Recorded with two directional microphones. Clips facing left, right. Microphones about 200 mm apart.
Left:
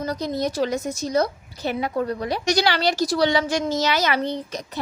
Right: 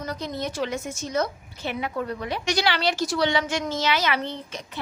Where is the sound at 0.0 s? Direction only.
35° left (ahead or behind).